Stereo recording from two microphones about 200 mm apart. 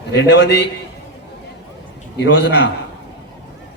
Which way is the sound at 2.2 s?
65° left (ahead or behind).